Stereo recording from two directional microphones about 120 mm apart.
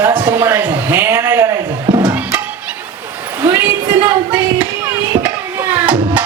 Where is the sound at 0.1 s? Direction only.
40° right (ahead or behind).